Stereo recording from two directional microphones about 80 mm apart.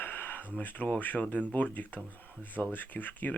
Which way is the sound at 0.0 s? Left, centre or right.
Left.